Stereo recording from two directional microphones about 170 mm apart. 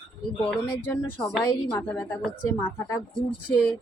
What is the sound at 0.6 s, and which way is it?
A woman's voice, 10° left (ahead or behind).